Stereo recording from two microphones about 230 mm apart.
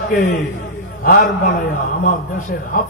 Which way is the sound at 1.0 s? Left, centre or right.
Left.